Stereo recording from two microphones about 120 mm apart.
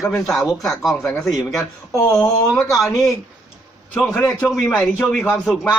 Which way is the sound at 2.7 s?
Centre (ahead or behind).